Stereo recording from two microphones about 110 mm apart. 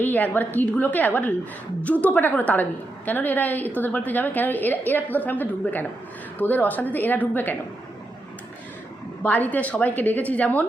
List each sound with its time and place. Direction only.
0.0 s a woman's voice: 15° left (ahead or behind)
9.2 s a woman's voice: 15° left (ahead or behind)